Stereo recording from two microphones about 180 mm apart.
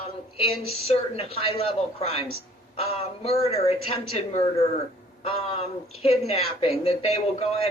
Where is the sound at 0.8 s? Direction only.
35° left (ahead or behind).